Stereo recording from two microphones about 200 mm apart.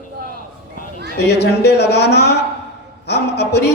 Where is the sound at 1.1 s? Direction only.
55° left (ahead or behind).